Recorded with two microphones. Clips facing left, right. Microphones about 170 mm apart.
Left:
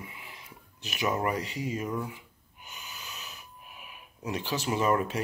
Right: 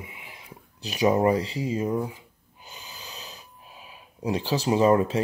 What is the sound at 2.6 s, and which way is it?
Snort, 35° right (ahead or behind).